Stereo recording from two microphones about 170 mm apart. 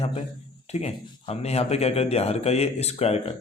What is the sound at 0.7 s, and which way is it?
A man's voice, 40° left (ahead or behind).